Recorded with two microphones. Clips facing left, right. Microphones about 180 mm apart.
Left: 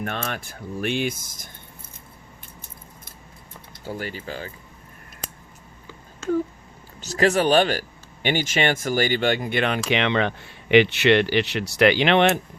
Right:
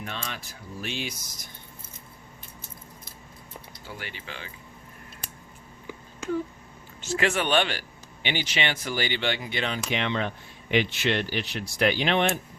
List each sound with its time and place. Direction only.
0.0 s speech: 55° left (ahead or behind)
3.8 s speech: 40° left (ahead or behind)
6.2 s speech: 15° right (ahead or behind)
7.0 s speech: 40° left (ahead or behind); by 12.4 s 75° left (ahead or behind)